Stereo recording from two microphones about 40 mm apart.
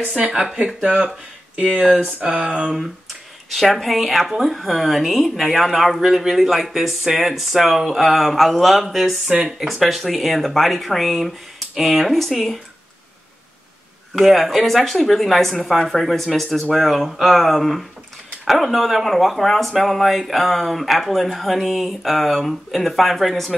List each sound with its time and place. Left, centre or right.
0.7 s speech: right
2.0 s a sound: right
2.4 s speech: centre
2.7 s speech: centre
14.2 s speech: centre